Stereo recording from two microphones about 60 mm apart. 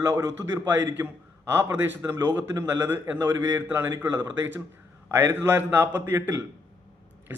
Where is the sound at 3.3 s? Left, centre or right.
Right.